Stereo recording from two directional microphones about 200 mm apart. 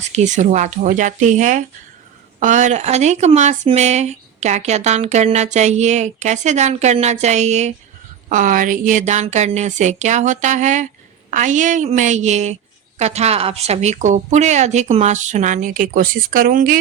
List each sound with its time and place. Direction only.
0.1 s speech: 35° right (ahead or behind)